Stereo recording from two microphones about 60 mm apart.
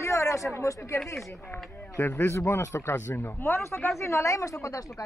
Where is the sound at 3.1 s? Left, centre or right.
Left.